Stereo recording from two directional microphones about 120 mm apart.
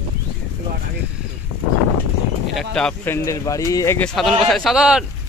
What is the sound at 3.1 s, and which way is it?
Speech, 25° left (ahead or behind).